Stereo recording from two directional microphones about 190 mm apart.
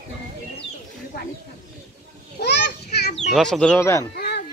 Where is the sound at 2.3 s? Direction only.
60° left (ahead or behind).